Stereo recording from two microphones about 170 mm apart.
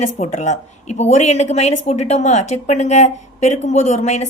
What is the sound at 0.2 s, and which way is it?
A woman's voice, 45° left (ahead or behind).